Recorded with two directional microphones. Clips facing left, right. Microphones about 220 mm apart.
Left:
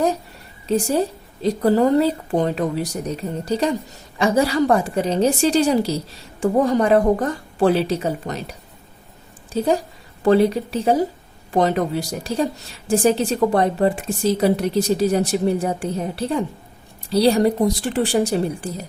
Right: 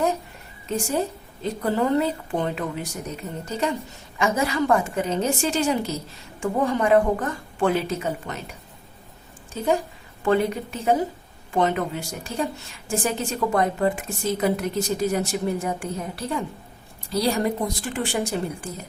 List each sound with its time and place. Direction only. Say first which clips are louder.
0.7 s a woman's voice: left 6 dB; 35° left (ahead or behind)
9.6 s a woman's voice: left 4 dB; 35° left (ahead or behind)